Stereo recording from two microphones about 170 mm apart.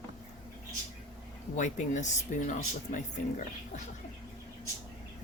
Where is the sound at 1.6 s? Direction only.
45° left (ahead or behind).